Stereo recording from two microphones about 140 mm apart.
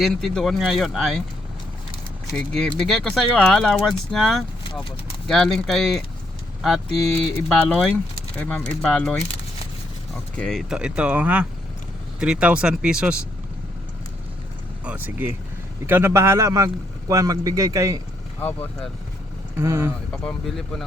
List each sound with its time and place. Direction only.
0.0 s speech: centre (ahead or behind)
2.3 s speech: 5° left (ahead or behind)
10.3 s speech: 5° left (ahead or behind)
10.8 s speech: 10° right (ahead or behind)
14.8 s a man's voice: 15° right (ahead or behind)
18.3 s speech: 15° left (ahead or behind)
19.6 s speech: 15° right (ahead or behind)
20.1 s speech: 5° left (ahead or behind)